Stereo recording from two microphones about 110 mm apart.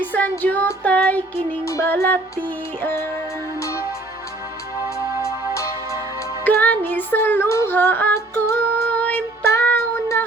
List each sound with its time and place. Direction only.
0.0 s music: 15° left (ahead or behind)
1.6 s music: 25° left (ahead or behind)
5.5 s music: 30° left (ahead or behind)
6.4 s music: 15° left (ahead or behind)
9.0 s child singing: 15° left (ahead or behind)